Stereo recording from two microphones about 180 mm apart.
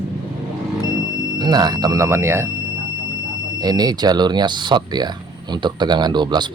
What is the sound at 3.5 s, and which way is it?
Speech, 20° right (ahead or behind).